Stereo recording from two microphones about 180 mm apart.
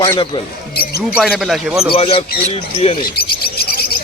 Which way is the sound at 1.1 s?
5° right (ahead or behind).